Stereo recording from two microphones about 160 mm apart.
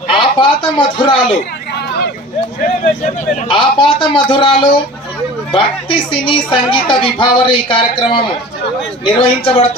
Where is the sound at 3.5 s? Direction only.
30° left (ahead or behind).